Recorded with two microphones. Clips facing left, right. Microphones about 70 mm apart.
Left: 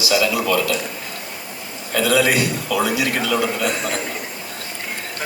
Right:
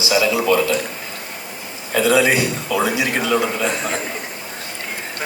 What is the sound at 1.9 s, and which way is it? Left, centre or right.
A man's voice, right.